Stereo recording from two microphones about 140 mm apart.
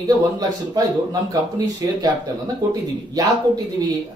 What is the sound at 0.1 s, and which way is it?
Speech, 25° right (ahead or behind).